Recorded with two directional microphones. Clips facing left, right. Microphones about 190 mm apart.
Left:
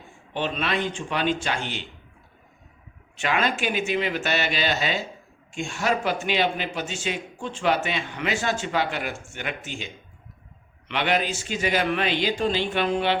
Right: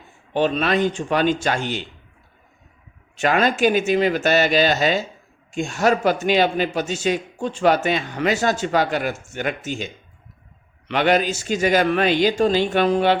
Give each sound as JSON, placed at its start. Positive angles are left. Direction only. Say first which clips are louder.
{"t": 0.3, "sound": "speech", "louder": "right 7 dB", "side_deg": -40}
{"t": 3.2, "sound": "a man's voice", "louder": "right 7 dB", "side_deg": -40}